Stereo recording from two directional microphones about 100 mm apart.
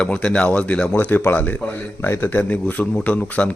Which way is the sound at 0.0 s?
10° left (ahead or behind).